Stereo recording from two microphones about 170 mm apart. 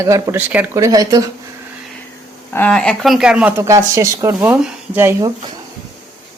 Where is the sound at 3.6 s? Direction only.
20° right (ahead or behind).